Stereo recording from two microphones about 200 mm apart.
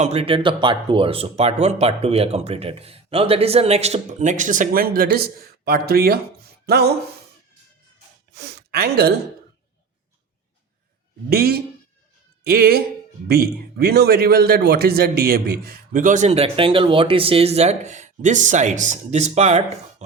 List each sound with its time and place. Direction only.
0.0 s speech: 30° right (ahead or behind); by 6.9 s 55° right (ahead or behind)
8.3 s a sound: 55° right (ahead or behind)
11.3 s speech: 50° right (ahead or behind); by 19.6 s 35° right (ahead or behind)